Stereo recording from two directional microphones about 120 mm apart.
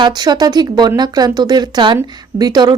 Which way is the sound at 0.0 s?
35° right (ahead or behind).